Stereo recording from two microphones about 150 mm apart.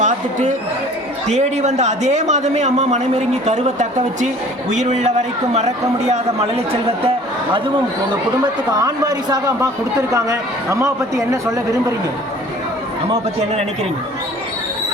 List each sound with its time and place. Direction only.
0.0 s a sound: 55° right (ahead or behind)
1.3 s a man's voice: 50° right (ahead or behind)
8.7 s a man's voice: 25° right (ahead or behind)